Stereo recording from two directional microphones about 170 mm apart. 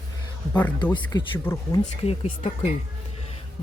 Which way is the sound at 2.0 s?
35° left (ahead or behind).